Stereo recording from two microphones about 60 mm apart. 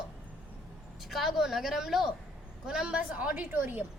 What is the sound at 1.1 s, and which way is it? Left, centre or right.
A woman's voice, centre.